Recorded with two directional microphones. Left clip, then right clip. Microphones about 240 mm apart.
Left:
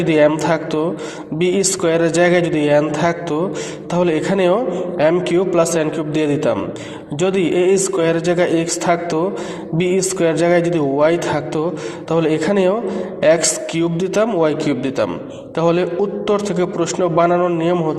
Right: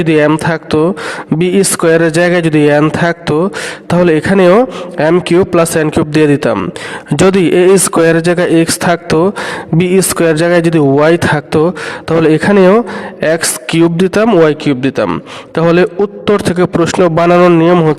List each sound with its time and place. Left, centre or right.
0.0 s a man's voice: right